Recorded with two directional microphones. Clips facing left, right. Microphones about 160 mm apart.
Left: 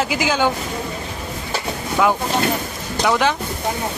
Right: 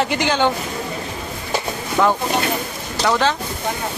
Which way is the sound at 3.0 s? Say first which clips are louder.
Even; 15° left (ahead or behind).